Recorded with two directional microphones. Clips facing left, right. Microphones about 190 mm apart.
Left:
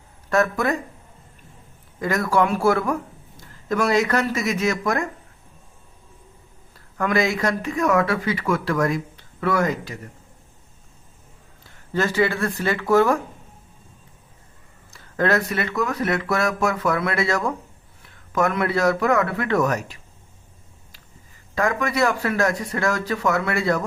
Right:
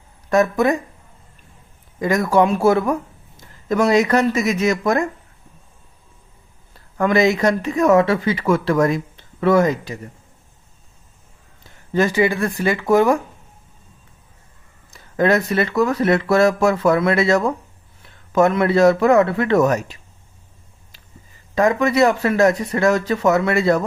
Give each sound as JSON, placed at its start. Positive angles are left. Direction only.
{"t": 0.3, "sound": "speech", "side_deg": -15}
{"t": 2.0, "sound": "speech", "side_deg": -15}
{"t": 7.0, "sound": "speech", "side_deg": -20}
{"t": 11.9, "sound": "speech", "side_deg": -15}
{"t": 14.8, "sound": "speech", "side_deg": -15}
{"t": 21.5, "sound": "speech", "side_deg": -20}